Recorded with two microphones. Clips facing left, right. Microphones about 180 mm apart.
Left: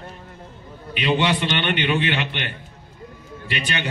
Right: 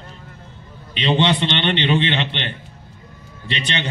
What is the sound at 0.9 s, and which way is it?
A man's voice, 25° right (ahead or behind).